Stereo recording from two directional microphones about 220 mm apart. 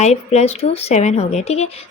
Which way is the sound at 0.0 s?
30° left (ahead or behind).